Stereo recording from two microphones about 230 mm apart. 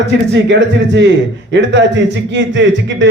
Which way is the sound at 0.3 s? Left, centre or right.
Right.